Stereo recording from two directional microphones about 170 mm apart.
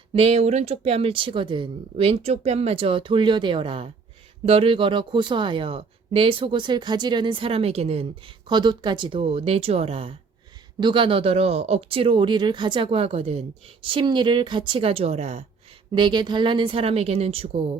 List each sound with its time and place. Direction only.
0.1 s speech: 35° right (ahead or behind)
8.4 s speech: 25° right (ahead or behind)
15.9 s speech: 25° right (ahead or behind)